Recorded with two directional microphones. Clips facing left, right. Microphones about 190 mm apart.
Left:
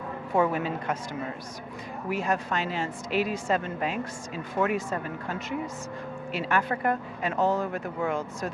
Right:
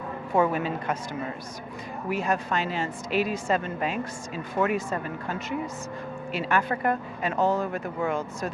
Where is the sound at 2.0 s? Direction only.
15° right (ahead or behind).